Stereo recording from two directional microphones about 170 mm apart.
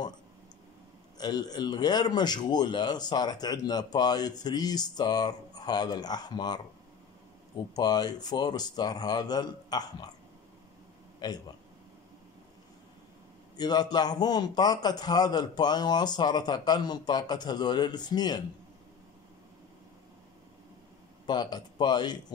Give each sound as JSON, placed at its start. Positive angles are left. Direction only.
{"t": 1.1, "sound": "a man's voice", "side_deg": 25}
{"t": 11.1, "sound": "speech", "side_deg": 25}
{"t": 13.6, "sound": "a man's voice", "side_deg": 25}
{"t": 21.3, "sound": "a man's voice", "side_deg": 25}